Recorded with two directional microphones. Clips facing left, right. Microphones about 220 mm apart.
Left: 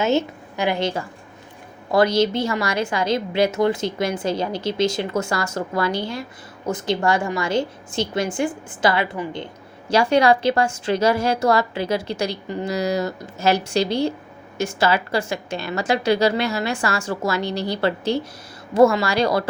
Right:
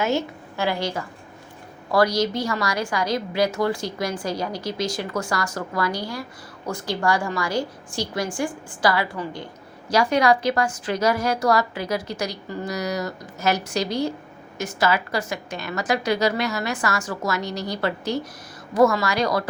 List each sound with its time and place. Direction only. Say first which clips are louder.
0.0 s a woman's voice: left 3 dB; 25° left (ahead or behind)